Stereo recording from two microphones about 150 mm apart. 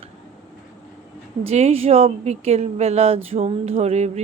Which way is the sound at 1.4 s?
45° right (ahead or behind).